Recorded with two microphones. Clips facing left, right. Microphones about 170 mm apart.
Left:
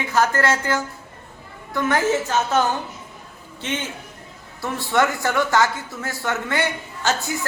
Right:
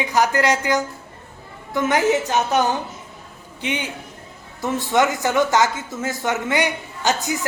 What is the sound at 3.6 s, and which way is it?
Speech, 15° right (ahead or behind).